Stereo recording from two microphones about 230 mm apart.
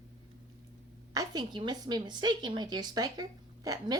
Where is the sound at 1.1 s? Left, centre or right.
Centre.